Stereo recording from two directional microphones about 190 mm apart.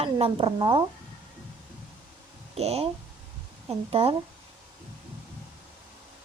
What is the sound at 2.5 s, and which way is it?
A woman's voice, 35° right (ahead or behind).